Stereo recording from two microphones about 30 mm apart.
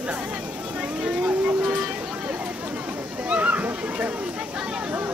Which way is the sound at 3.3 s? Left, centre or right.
Right.